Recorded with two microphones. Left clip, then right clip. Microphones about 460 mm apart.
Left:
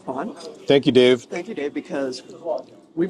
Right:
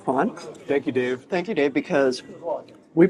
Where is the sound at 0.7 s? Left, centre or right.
Left.